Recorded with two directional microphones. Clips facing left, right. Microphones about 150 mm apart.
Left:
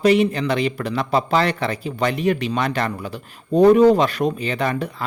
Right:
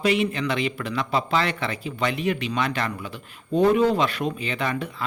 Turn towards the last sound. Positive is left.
turn(degrees=40)  # may be behind; listen again after turning